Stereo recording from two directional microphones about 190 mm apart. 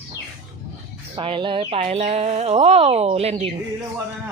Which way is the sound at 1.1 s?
25° right (ahead or behind).